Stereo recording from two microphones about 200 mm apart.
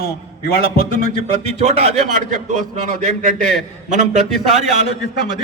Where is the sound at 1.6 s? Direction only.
35° right (ahead or behind).